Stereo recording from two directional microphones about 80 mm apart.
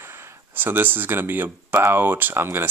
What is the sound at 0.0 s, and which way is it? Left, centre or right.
Speech, right.